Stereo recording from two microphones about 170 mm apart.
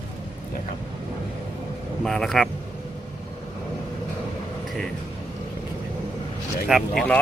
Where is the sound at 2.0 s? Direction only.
Centre (ahead or behind).